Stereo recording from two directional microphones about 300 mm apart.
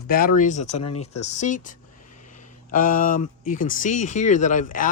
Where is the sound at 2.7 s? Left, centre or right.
Left.